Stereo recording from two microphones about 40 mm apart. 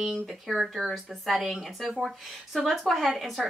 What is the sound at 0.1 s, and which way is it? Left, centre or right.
Speech, centre.